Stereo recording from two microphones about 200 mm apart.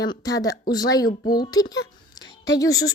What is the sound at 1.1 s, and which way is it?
Speech, 45° left (ahead or behind).